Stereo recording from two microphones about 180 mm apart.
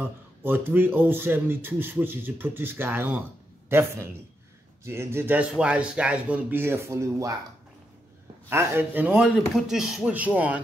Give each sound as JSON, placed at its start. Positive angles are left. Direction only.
{"t": 0.4, "sound": "a man's voice", "side_deg": -10}
{"t": 8.5, "sound": "speech", "side_deg": -10}